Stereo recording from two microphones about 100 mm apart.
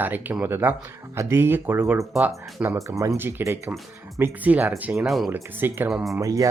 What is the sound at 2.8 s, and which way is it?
Speech, 30° right (ahead or behind).